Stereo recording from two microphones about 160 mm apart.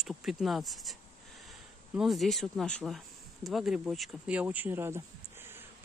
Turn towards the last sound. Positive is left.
turn(degrees=-15)  # may be behind; listen again after turning